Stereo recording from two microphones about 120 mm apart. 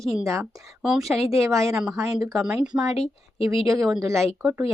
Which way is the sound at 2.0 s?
30° right (ahead or behind).